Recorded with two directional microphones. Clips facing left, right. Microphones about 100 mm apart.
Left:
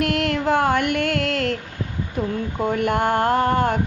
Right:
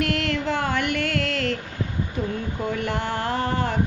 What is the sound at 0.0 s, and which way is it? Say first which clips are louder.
Music: left 3 dB; 50° left (ahead or behind).